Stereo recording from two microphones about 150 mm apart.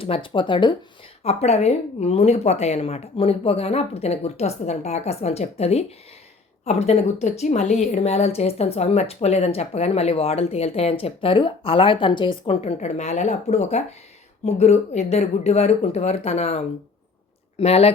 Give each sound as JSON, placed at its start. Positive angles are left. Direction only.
{"t": 0.0, "sound": "speech", "side_deg": 35}
{"t": 1.2, "sound": "a woman's voice", "side_deg": 45}
{"t": 12.7, "sound": "a woman's voice", "side_deg": 50}